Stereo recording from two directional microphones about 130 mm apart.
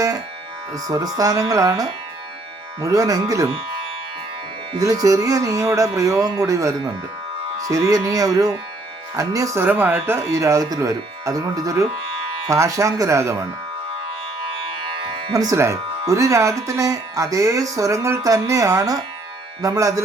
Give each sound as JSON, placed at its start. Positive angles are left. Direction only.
{"t": 0.7, "sound": "speech", "side_deg": -30}
{"t": 5.0, "sound": "speech", "side_deg": -25}
{"t": 9.6, "sound": "speech", "side_deg": -15}
{"t": 15.3, "sound": "speech", "side_deg": -25}